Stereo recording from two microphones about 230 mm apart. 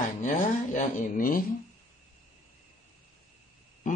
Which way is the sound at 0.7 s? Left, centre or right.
Left.